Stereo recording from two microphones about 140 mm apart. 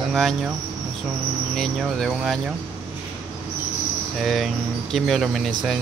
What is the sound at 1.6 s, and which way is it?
Speech, centre (ahead or behind).